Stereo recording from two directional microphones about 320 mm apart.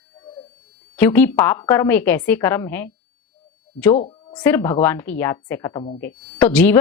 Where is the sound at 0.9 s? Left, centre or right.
Centre.